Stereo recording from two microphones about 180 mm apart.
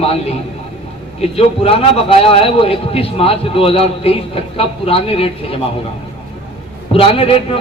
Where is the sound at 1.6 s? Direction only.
30° left (ahead or behind).